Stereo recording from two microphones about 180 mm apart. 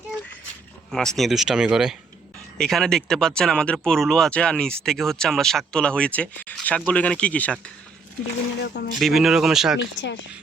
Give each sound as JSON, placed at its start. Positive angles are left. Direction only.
{"t": 0.9, "sound": "speech", "side_deg": 0}
{"t": 8.6, "sound": "speech", "side_deg": 70}
{"t": 9.0, "sound": "speech", "side_deg": 0}
{"t": 9.7, "sound": "speech", "side_deg": 85}